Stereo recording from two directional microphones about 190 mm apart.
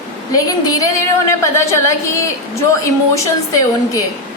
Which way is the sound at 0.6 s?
15° left (ahead or behind).